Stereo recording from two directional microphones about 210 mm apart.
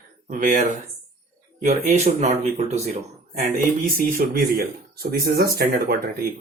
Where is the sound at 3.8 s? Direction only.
45° right (ahead or behind).